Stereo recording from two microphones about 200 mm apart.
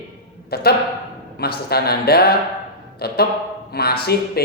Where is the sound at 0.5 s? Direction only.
50° left (ahead or behind).